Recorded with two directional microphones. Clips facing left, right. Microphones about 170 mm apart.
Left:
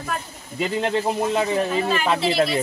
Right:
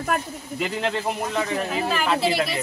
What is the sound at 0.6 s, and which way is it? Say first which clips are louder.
Speech: left 4 dB; 25° left (ahead or behind).